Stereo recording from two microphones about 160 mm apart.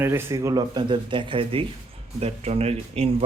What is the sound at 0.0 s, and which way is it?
A man's voice, 15° right (ahead or behind).